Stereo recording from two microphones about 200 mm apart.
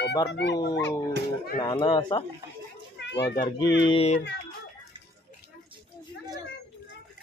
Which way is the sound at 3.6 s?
60° left (ahead or behind).